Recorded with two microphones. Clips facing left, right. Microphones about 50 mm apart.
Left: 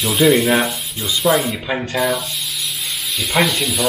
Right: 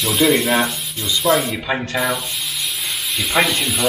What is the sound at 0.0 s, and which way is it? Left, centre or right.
Sanding, centre.